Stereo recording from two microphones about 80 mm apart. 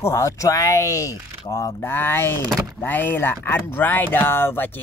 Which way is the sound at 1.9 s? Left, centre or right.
Left.